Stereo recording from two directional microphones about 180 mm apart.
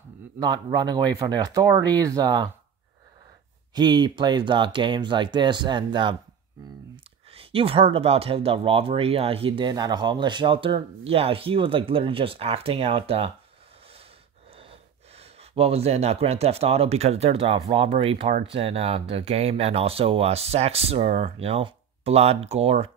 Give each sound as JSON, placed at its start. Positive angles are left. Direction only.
{"t": 0.4, "sound": "speech", "side_deg": -20}
{"t": 3.7, "sound": "speech", "side_deg": -25}
{"t": 7.3, "sound": "speech", "side_deg": -30}
{"t": 14.6, "sound": "speech", "side_deg": -35}